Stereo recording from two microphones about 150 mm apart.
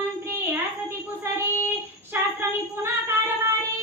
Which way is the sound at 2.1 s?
15° right (ahead or behind).